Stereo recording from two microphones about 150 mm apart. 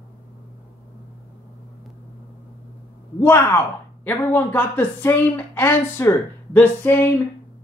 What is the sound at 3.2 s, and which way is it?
Speech, 20° left (ahead or behind).